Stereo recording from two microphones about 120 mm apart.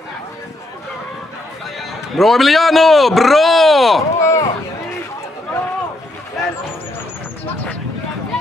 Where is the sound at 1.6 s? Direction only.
Centre (ahead or behind).